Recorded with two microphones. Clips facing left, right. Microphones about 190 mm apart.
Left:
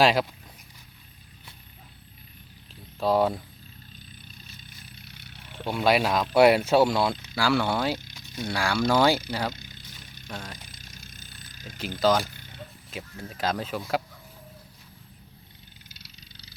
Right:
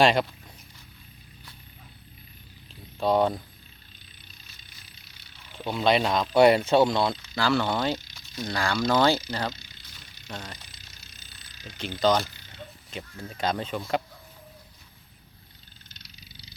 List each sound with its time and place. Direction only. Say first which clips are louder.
0.0 s speech: even; 5° left (ahead or behind)
3.0 s speech: even; 5° left (ahead or behind)
5.0 s vehicle: left 7 dB; 60° left (ahead or behind)
5.7 s speech: even; 5° left (ahead or behind)
9.6 s a sound: left 5 dB; 50° left (ahead or behind)
10.2 s speech: even; centre (ahead or behind)
10.6 s a sound: left 5 dB; 50° left (ahead or behind)
11.9 s speech: even; 5° left (ahead or behind)
12.3 s a sound: left 4 dB; 55° left (ahead or behind)
12.9 s speech: even; centre (ahead or behind)